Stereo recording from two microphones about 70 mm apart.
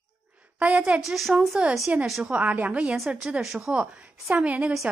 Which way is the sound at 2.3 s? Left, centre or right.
Right.